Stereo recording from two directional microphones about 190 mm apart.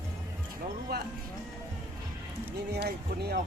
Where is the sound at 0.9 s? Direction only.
55° right (ahead or behind).